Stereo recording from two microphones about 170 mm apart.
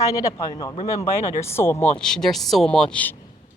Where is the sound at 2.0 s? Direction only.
5° left (ahead or behind).